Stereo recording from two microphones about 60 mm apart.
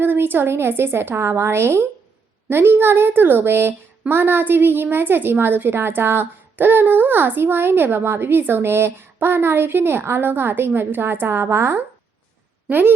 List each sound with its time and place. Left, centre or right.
0.0 s a woman's voice: right
2.5 s a woman's voice: right
12.6 s a woman's voice: right